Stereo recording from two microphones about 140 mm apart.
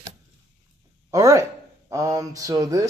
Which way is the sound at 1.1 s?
20° right (ahead or behind).